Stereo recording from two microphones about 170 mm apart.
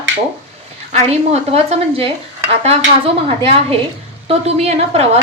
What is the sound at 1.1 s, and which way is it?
A woman's voice, 40° right (ahead or behind).